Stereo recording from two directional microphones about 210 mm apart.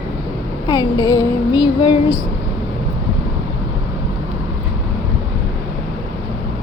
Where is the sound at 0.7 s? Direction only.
20° left (ahead or behind).